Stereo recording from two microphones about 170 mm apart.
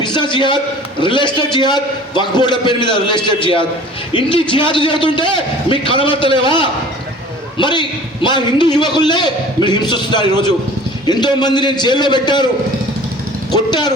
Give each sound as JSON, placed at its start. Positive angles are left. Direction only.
{"t": 0.0, "sound": "a sound", "side_deg": 25}
{"t": 1.0, "sound": "a man's voice", "side_deg": 30}
{"t": 13.5, "sound": "speech", "side_deg": 25}